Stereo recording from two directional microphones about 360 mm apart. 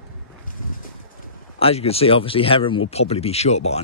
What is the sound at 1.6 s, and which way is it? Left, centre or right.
Speech, centre.